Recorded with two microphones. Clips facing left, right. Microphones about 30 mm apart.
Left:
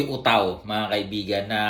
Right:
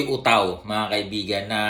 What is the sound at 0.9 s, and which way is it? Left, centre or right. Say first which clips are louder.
Speech: even; right.